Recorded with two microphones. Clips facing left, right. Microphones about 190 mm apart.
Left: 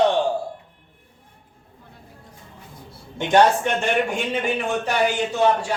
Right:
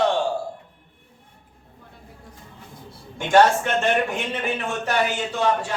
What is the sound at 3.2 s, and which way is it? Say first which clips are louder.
Speech: even; 15° left (ahead or behind).